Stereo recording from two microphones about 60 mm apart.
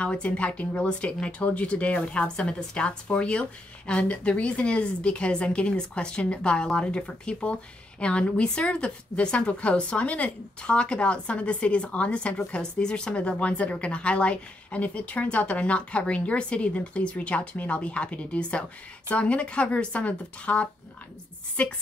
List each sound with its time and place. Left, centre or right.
0.0 s speech: centre